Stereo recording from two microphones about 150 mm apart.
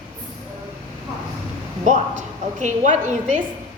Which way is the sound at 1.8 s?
55° right (ahead or behind).